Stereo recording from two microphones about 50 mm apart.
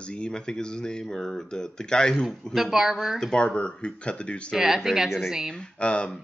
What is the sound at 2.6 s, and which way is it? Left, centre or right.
Speech, centre.